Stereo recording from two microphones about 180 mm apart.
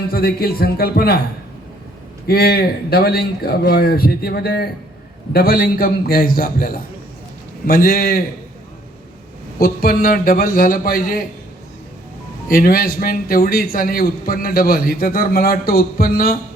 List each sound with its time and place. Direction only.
0.1 s a man's voice: 60° left (ahead or behind)
2.2 s a man's voice: 60° left (ahead or behind)
9.6 s a man's voice: 55° left (ahead or behind)
12.5 s a man's voice: 55° left (ahead or behind)